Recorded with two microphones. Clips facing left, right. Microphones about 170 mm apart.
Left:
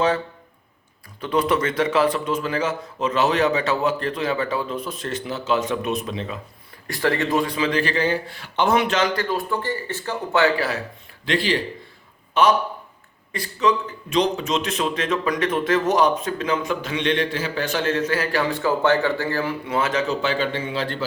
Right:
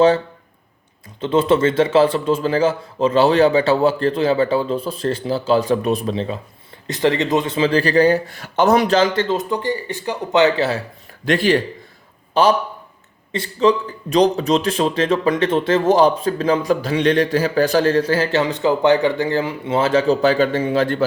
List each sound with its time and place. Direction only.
1.2 s a man's voice: 25° right (ahead or behind)
6.8 s a man's voice: 20° right (ahead or behind)
11.3 s speech: 50° right (ahead or behind)
12.3 s a man's voice: 30° right (ahead or behind); by 21.0 s 50° right (ahead or behind)